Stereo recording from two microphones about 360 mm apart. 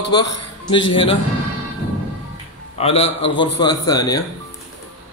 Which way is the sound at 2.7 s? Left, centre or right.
Centre.